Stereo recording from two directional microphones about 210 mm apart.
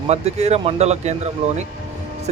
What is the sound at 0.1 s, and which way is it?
Speech, 30° right (ahead or behind).